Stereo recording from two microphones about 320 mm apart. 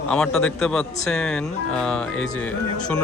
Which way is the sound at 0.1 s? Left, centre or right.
Centre.